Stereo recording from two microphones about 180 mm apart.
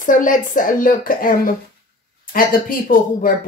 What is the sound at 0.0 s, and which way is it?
Speech, 45° left (ahead or behind).